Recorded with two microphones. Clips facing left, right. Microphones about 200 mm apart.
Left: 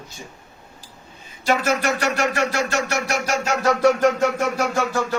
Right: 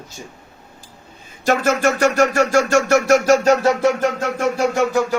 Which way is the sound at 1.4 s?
50° right (ahead or behind).